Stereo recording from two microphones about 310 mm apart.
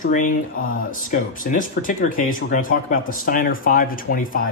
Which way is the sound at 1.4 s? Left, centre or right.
Left.